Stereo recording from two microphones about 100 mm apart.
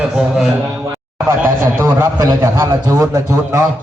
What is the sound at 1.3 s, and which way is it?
Speech, 25° right (ahead or behind).